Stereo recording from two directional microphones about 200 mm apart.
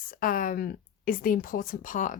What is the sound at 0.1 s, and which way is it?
Speech, 45° left (ahead or behind).